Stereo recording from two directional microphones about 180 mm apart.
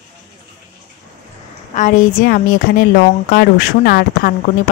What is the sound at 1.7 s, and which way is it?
A woman's voice, 50° left (ahead or behind).